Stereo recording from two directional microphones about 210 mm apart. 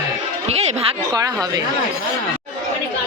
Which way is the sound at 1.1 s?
15° right (ahead or behind).